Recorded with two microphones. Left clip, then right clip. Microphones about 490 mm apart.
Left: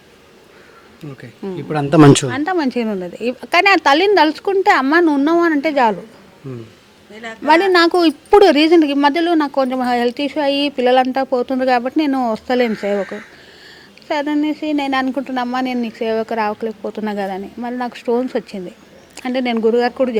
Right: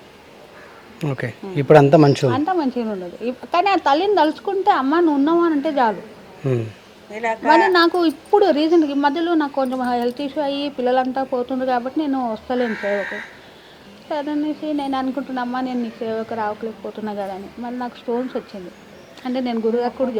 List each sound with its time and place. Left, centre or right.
1.0 s speech: right
1.9 s speech: left
2.3 s speech: left
7.4 s a woman's voice: left
14.1 s speech: left